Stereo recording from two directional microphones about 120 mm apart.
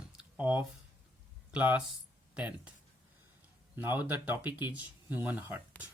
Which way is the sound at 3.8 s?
15° right (ahead or behind).